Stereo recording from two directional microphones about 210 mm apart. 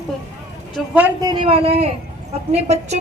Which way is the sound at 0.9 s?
20° right (ahead or behind).